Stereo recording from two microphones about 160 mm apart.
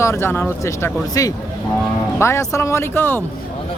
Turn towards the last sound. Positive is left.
turn(degrees=15)  # may be behind; listen again after turning